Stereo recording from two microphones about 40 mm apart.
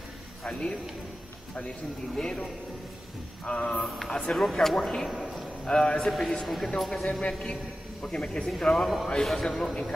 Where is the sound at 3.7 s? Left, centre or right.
Centre.